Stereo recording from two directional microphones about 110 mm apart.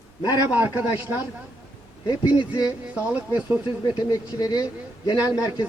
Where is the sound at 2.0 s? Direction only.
45° left (ahead or behind).